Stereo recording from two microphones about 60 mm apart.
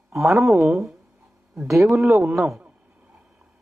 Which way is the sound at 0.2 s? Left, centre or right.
Centre.